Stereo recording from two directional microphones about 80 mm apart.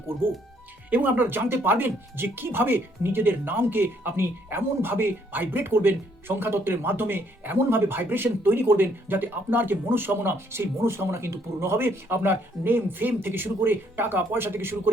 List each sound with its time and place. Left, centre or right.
0.9 s speech: right